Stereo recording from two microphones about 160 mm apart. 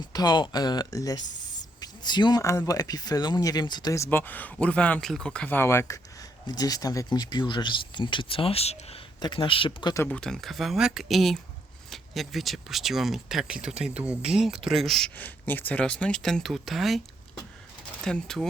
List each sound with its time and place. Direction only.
0.1 s speech: 25° left (ahead or behind)
9.2 s speech: 30° left (ahead or behind)
10.0 s speech: 5° left (ahead or behind)
18.0 s speech: 5° left (ahead or behind)